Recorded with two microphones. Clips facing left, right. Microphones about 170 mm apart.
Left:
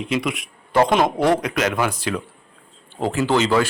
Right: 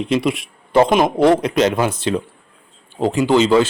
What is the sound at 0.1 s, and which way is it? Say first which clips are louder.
Speech: right 5 dB; 30° right (ahead or behind).